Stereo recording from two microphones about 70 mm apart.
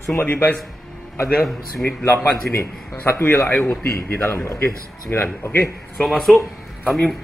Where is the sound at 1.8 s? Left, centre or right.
Left.